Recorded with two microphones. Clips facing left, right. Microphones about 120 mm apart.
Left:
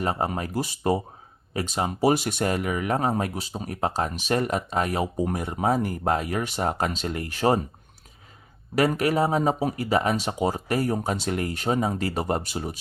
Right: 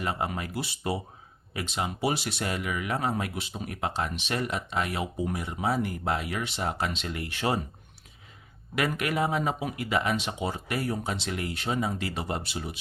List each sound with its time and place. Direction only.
0.0 s speech: 40° left (ahead or behind)
8.7 s speech: 35° left (ahead or behind)